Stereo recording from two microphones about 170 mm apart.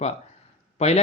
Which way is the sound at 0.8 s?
40° left (ahead or behind).